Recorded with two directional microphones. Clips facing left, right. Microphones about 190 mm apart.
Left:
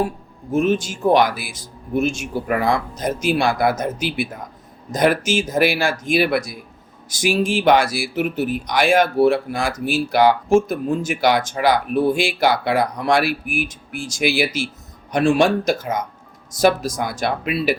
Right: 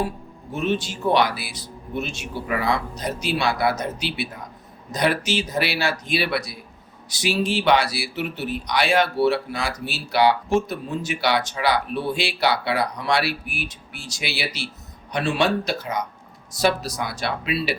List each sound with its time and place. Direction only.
0.5 s speech: 45° left (ahead or behind)